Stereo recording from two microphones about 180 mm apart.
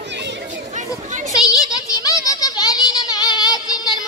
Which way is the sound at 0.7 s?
45° right (ahead or behind).